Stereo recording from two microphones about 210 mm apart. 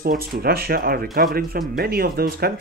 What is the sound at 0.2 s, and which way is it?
Speech, 45° right (ahead or behind).